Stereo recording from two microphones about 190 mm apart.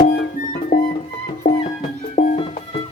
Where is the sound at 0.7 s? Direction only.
60° left (ahead or behind).